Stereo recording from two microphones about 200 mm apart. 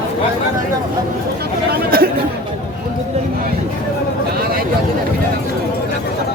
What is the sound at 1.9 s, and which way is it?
Speech, 50° right (ahead or behind).